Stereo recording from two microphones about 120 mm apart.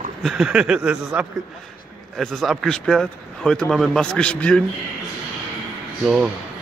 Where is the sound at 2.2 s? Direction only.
5° left (ahead or behind).